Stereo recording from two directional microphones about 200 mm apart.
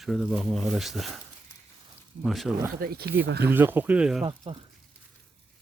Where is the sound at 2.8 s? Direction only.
50° right (ahead or behind).